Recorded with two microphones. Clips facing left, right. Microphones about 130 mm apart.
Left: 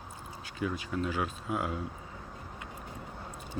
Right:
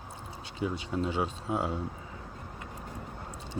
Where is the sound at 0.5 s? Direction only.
25° right (ahead or behind).